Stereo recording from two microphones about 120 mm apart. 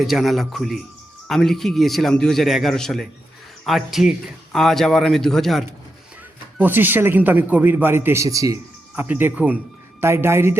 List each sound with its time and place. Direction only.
0.0 s a man's voice: centre (ahead or behind)
6.6 s speech: 15° right (ahead or behind)